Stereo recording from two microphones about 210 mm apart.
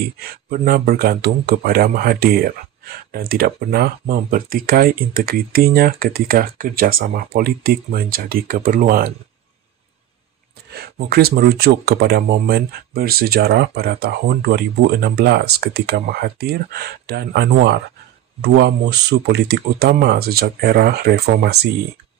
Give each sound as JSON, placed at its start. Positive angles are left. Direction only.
{"t": 0.0, "sound": "speech", "side_deg": -45}
{"t": 10.7, "sound": "speech", "side_deg": -45}